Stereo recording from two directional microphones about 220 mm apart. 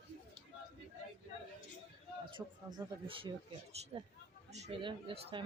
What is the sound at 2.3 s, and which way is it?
Speech, 20° right (ahead or behind).